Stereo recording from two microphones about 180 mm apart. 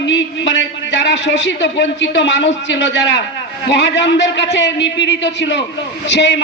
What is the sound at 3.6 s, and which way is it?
A man's voice, 75° left (ahead or behind).